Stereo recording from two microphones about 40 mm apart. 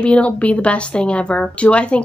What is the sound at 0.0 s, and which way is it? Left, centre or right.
A woman's voice, left.